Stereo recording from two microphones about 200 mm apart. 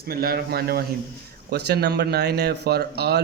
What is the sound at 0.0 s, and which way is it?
Speech, 50° right (ahead or behind).